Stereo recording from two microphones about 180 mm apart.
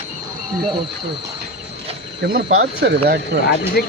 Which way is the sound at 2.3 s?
60° right (ahead or behind).